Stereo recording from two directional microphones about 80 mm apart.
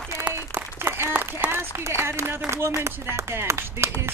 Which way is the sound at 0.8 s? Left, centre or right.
Right.